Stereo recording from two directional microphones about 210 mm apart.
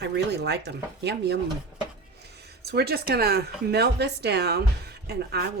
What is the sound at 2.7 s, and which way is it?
Speech, 50° right (ahead or behind).